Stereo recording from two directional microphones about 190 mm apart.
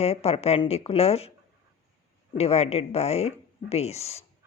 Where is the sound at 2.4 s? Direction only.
35° left (ahead or behind).